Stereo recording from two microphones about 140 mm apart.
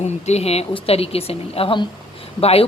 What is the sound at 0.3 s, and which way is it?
A woman's voice, 50° left (ahead or behind).